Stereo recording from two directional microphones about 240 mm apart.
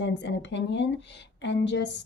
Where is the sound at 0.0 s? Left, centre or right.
Left.